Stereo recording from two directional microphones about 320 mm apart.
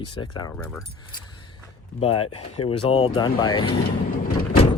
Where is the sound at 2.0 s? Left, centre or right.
Centre.